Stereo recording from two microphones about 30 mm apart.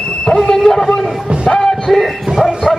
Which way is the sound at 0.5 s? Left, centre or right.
Centre.